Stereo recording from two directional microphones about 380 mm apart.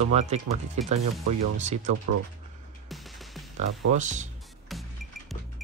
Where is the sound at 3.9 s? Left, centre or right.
Centre.